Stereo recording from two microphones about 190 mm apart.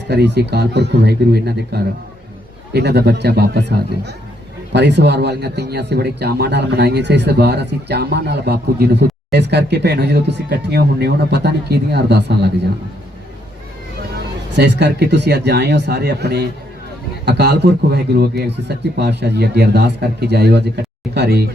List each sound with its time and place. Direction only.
0.1 s speech: 60° right (ahead or behind)
14.5 s speech: 65° right (ahead or behind)